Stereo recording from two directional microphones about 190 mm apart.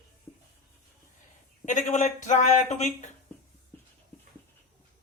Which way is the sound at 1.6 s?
40° left (ahead or behind).